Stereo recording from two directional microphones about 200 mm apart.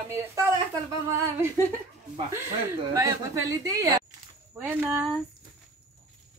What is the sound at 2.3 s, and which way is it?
Speech, 15° right (ahead or behind).